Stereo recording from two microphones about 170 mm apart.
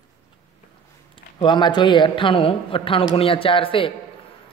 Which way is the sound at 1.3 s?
25° left (ahead or behind).